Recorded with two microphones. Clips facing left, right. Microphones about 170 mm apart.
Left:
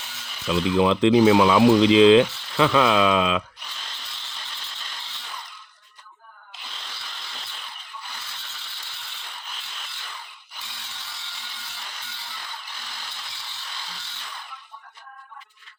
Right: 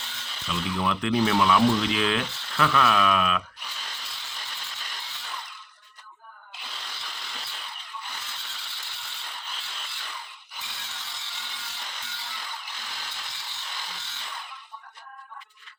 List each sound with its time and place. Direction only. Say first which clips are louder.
0.5 s speech: left 8 dB; 20° left (ahead or behind)
1.8 s speech: left 12 dB; 90° left
2.0 s speech: left 13 dB; 20° left (ahead or behind)